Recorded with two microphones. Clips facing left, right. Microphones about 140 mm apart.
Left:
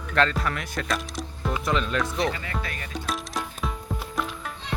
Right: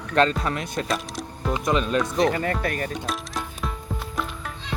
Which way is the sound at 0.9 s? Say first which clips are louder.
Right 2 dB; centre (ahead or behind).